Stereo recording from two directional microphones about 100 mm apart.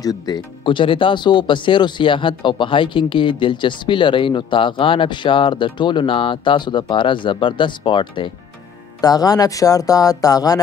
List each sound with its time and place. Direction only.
0.0 s speech: 40° left (ahead or behind)
0.7 s speech: 60° left (ahead or behind)
9.0 s speech: 40° left (ahead or behind)